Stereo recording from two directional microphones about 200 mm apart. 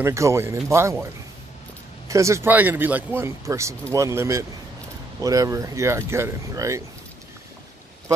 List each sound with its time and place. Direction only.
0.0 s speech: 15° right (ahead or behind)
2.0 s speech: 15° right (ahead or behind)